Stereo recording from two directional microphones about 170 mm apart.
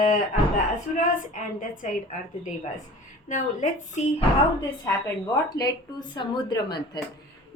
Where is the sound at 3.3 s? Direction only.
50° left (ahead or behind).